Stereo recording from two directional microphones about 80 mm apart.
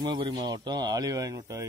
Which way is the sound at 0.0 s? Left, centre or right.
Right.